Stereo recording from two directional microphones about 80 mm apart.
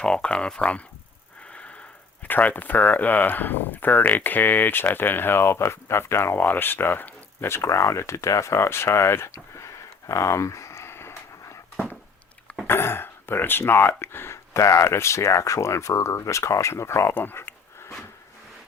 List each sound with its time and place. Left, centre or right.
0.0 s speech: centre
1.5 s wheeze: centre
2.2 s speech: left
12.6 s speech: left